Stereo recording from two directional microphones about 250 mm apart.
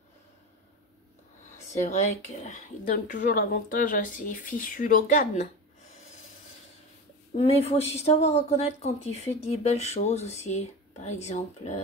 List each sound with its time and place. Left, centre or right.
1.7 s speech: left
7.3 s speech: left